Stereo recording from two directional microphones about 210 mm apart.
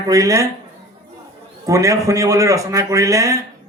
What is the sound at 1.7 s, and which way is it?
A man's voice, 15° right (ahead or behind).